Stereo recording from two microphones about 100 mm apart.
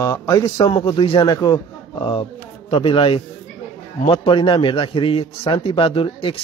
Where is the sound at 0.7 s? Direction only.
65° left (ahead or behind).